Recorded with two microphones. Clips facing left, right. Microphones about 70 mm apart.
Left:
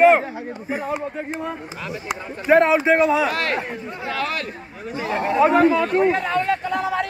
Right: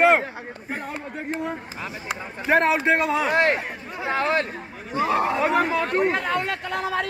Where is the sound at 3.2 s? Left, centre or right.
Right.